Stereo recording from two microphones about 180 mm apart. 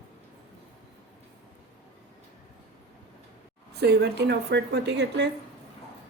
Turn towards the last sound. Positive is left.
turn(degrees=-70)  # may be behind; listen again after turning